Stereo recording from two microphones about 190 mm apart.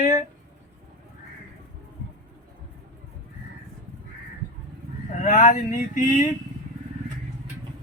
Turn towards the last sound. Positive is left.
turn(degrees=45)  # may be behind; listen again after turning